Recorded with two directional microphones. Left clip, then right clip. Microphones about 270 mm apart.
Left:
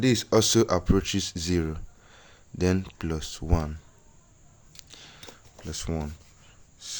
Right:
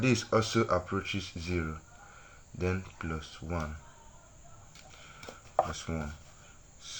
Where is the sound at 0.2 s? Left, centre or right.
Left.